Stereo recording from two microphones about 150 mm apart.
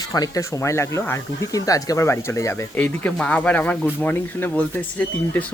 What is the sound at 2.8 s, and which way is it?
Speech, 10° left (ahead or behind).